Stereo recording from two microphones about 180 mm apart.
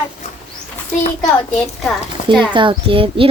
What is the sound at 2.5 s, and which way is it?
Speech, 30° right (ahead or behind).